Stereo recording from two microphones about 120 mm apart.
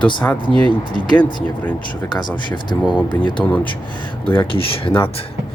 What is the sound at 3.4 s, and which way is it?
Speech, 15° left (ahead or behind).